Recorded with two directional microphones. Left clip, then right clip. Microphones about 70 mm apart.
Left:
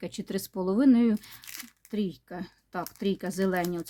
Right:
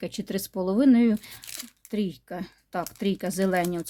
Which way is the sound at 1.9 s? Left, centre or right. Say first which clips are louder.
Right 3 dB; right.